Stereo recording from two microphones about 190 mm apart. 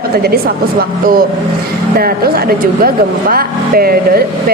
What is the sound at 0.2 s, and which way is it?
A woman's voice, 55° right (ahead or behind).